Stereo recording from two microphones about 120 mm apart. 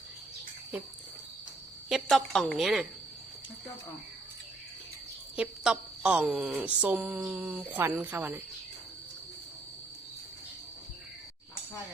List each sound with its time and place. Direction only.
1.9 s a woman's voice: centre (ahead or behind)
5.4 s a woman's voice: 5° right (ahead or behind)
7.2 s a woman's voice: 5° right (ahead or behind)
7.4 s a woman's voice: 15° right (ahead or behind)